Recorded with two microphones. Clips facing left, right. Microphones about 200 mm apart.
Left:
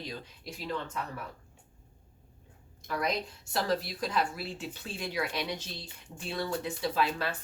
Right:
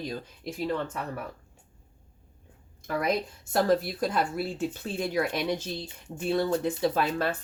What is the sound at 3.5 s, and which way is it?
Speech, 50° right (ahead or behind).